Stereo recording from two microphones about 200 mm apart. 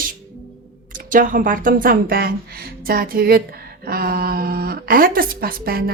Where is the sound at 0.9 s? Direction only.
40° right (ahead or behind).